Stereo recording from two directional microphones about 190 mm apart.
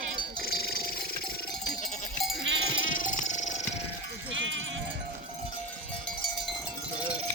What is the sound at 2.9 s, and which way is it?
Music, 45° left (ahead or behind).